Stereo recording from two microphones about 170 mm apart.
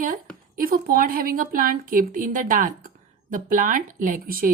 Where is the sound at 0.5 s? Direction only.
60° right (ahead or behind).